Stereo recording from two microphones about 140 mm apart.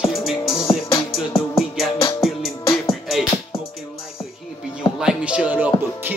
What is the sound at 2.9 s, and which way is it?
Music, centre (ahead or behind).